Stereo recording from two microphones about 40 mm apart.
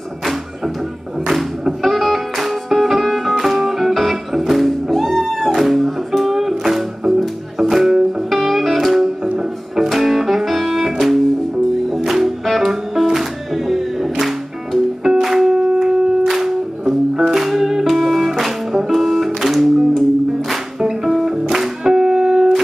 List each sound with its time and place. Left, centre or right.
1.3 s music: centre
15.5 s shofar: right
15.8 s music: centre
20.8 s music: centre